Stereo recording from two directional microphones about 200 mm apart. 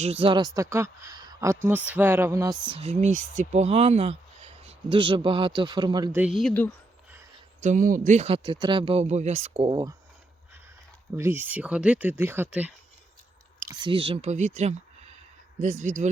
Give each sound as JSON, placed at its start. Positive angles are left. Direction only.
{"t": 0.0, "sound": "speech", "side_deg": -30}
{"t": 6.1, "sound": "speech", "side_deg": 0}
{"t": 7.6, "sound": "speech", "side_deg": -40}
{"t": 11.2, "sound": "speech", "side_deg": -10}
{"t": 13.8, "sound": "speech", "side_deg": -25}